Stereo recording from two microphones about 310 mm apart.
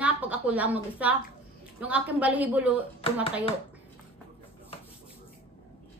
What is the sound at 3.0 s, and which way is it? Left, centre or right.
Speech, centre.